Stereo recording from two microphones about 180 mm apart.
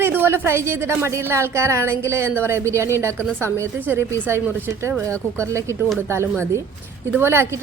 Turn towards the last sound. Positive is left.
turn(degrees=-15)  # may be behind; listen again after turning